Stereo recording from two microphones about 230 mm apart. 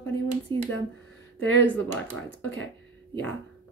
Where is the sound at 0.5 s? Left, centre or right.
Right.